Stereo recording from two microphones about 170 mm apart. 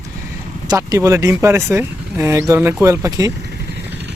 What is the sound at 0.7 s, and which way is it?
Speech, 20° right (ahead or behind).